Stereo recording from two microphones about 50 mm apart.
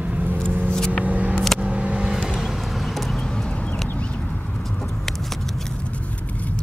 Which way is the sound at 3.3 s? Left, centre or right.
Centre.